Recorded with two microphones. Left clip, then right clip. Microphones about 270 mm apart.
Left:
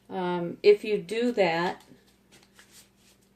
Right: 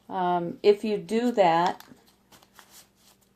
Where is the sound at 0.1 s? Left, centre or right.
Right.